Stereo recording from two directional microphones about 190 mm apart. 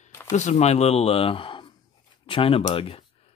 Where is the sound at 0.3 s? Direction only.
35° left (ahead or behind).